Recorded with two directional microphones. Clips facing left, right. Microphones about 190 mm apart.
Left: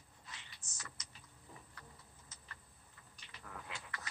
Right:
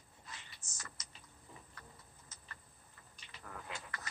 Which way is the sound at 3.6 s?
45° right (ahead or behind).